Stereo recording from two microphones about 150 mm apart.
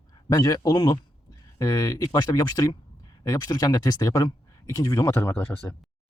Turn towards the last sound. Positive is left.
turn(degrees=10)  # may be behind; listen again after turning